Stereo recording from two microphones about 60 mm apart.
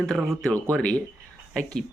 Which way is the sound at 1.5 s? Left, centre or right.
Centre.